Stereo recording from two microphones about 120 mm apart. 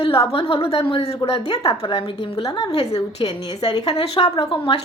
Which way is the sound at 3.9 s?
55° left (ahead or behind).